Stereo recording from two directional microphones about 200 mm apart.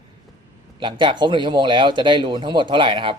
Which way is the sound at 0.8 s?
25° right (ahead or behind).